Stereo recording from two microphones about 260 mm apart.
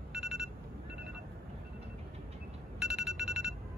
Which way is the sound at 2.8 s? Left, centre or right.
Centre.